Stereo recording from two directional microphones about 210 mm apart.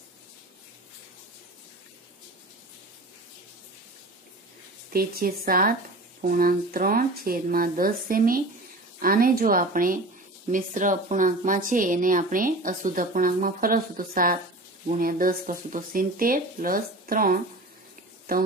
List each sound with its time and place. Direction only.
4.9 s speech: 45° right (ahead or behind)